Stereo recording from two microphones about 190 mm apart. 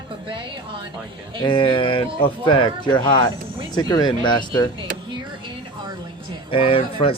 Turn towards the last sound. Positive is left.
turn(degrees=30)  # may be behind; listen again after turning